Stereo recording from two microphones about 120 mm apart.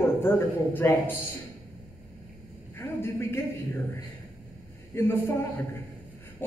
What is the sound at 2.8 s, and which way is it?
A man's voice, 20° left (ahead or behind).